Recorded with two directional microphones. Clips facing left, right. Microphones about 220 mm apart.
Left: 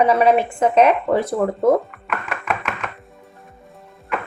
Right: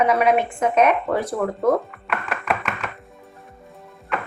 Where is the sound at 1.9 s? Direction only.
Centre (ahead or behind).